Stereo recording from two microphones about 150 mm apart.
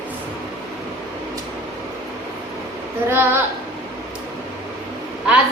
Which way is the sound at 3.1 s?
15° right (ahead or behind).